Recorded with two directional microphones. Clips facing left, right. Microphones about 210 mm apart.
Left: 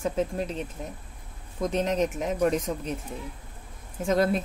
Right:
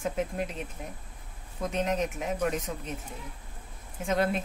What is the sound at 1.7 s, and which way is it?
Speech, 35° left (ahead or behind).